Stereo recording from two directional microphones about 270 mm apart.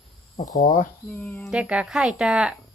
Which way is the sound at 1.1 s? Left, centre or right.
Centre.